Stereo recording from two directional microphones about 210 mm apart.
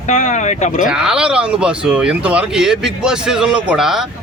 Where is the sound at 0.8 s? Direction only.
5° right (ahead or behind).